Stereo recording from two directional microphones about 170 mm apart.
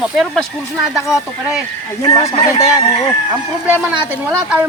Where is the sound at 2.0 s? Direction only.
20° left (ahead or behind).